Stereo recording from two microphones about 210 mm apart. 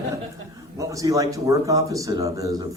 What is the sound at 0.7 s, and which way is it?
Speech, 15° right (ahead or behind).